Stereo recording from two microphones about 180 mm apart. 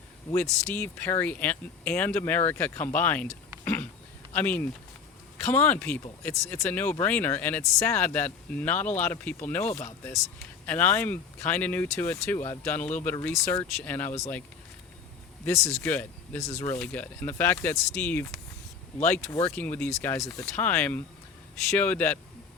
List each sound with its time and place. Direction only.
0.7 s speech: 10° left (ahead or behind)
3.6 s a sound: 10° left (ahead or behind)
4.3 s speech: 10° left (ahead or behind)
15.4 s speech: 15° left (ahead or behind)